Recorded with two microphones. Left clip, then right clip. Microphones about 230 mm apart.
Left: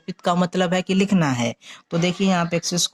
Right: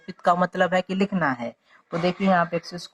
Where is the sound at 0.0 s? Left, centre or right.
Left.